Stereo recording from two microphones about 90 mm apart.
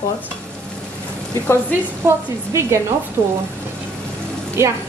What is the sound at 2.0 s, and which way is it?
Speech, 30° right (ahead or behind).